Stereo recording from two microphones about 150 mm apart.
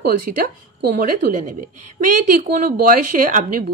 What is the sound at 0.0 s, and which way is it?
A woman's voice, 85° right.